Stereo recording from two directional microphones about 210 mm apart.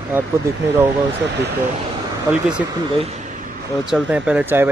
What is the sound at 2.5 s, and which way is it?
Speech, 30° right (ahead or behind).